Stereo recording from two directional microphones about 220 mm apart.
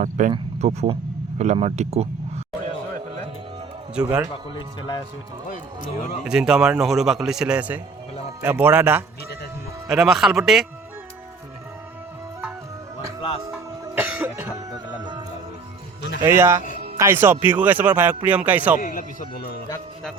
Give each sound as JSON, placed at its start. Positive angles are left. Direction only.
{"t": 0.0, "sound": "speech", "side_deg": -35}
{"t": 4.5, "sound": "speech", "side_deg": 20}
{"t": 6.2, "sound": "a man's voice", "side_deg": -5}
{"t": 13.5, "sound": "music", "side_deg": -10}
{"t": 16.2, "sound": "speech", "side_deg": -10}
{"t": 18.8, "sound": "speech", "side_deg": 40}